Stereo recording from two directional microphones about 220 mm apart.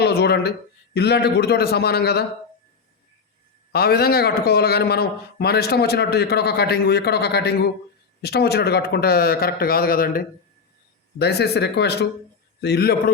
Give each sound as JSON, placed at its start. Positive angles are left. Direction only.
{"t": 0.0, "sound": "a man's voice", "side_deg": 50}
{"t": 3.7, "sound": "a man's voice", "side_deg": 45}